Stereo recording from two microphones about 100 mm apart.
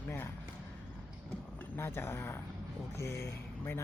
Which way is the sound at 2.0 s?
25° left (ahead or behind).